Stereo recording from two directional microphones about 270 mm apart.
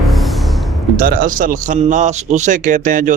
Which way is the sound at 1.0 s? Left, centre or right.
Right.